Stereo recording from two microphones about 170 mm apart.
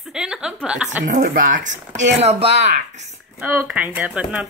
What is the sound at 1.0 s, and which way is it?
Speech, 50° right (ahead or behind).